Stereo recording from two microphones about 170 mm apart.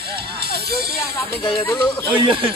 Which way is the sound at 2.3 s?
30° right (ahead or behind).